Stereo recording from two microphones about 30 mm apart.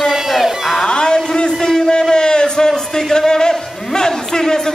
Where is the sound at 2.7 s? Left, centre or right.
Centre.